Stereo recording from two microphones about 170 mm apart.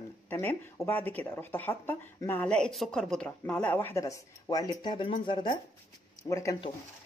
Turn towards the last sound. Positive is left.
turn(degrees=20)  # may be behind; listen again after turning